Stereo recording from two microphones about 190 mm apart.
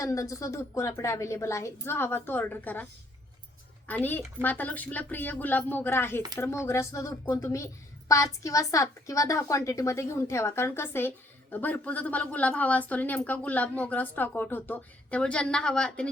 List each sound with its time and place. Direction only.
0.0 s a woman's voice: 15° left (ahead or behind)
3.8 s a woman's voice: 10° left (ahead or behind)